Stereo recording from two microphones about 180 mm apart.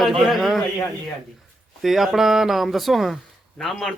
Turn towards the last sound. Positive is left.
turn(degrees=0)  # may be behind; listen again after turning